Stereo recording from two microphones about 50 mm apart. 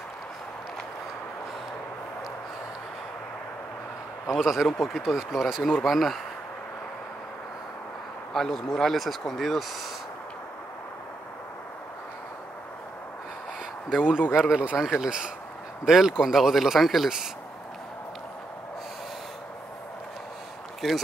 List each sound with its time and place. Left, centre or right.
4.4 s speech: centre
4.6 s speech: centre
5.0 s speech: centre
8.3 s a man's voice: centre
13.8 s speech: centre
14.5 s speech: right; by 17.3 s centre
20.8 s speech: centre